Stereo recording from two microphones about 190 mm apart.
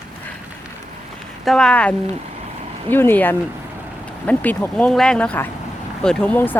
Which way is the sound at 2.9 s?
10° left (ahead or behind).